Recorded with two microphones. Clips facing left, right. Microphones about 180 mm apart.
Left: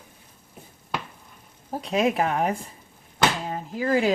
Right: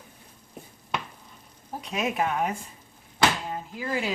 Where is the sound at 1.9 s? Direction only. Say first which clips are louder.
Left 5 dB; 35° left (ahead or behind).